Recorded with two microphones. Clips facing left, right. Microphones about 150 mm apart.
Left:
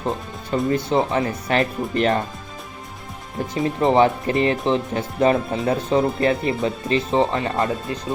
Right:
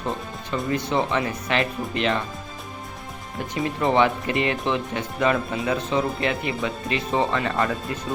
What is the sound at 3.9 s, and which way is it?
Speech, 35° left (ahead or behind).